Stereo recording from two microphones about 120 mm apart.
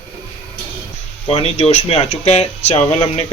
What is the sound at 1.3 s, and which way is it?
Speech, 55° left (ahead or behind).